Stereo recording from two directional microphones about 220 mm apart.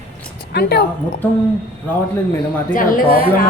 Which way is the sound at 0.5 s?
50° left (ahead or behind).